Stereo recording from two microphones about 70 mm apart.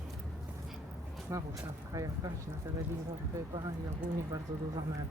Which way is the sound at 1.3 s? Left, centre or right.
Right.